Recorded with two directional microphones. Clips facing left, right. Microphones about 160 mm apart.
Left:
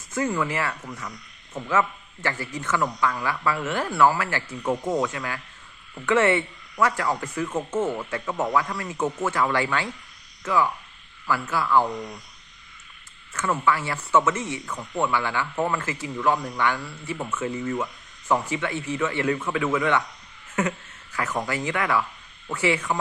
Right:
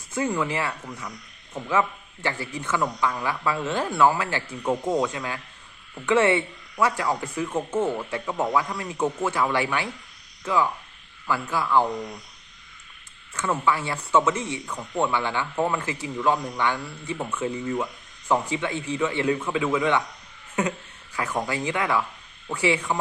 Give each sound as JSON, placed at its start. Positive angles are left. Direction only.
{"t": 0.1, "sound": "speech", "side_deg": -15}
{"t": 13.3, "sound": "speech", "side_deg": -15}